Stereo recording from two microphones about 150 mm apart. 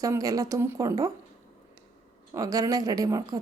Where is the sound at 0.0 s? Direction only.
25° right (ahead or behind).